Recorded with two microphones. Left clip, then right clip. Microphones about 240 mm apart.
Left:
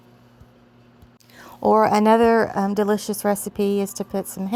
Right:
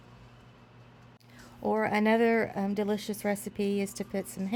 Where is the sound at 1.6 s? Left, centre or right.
Left.